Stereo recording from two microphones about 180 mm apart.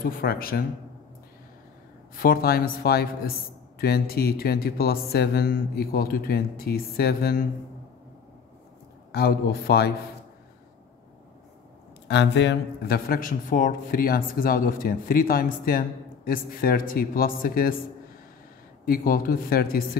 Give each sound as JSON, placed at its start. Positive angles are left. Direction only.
{"t": 0.0, "sound": "a man's voice", "side_deg": 55}
{"t": 2.1, "sound": "a man's voice", "side_deg": 55}
{"t": 9.1, "sound": "a man's voice", "side_deg": 60}
{"t": 12.1, "sound": "a man's voice", "side_deg": 75}
{"t": 18.9, "sound": "a man's voice", "side_deg": 50}